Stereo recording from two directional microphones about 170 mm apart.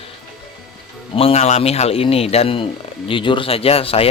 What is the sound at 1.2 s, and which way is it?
A man's voice, 35° left (ahead or behind).